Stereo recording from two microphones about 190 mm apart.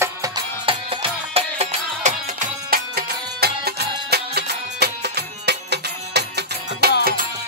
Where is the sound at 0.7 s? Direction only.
30° right (ahead or behind); by 6.9 s 60° right (ahead or behind).